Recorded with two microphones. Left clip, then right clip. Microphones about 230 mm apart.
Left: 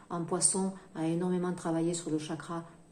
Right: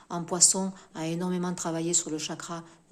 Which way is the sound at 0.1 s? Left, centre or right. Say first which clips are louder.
Right 6 dB; right.